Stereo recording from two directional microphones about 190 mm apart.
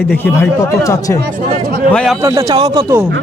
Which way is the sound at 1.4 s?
45° right (ahead or behind).